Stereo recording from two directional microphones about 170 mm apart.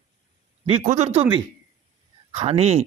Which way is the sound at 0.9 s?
40° right (ahead or behind).